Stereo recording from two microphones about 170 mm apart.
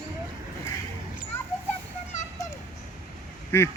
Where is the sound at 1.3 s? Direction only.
15° left (ahead or behind).